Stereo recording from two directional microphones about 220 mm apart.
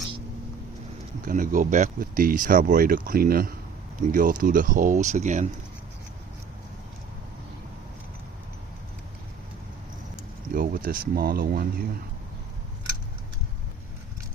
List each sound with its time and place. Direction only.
1.2 s speech: 35° right (ahead or behind)
10.5 s speech: 40° right (ahead or behind)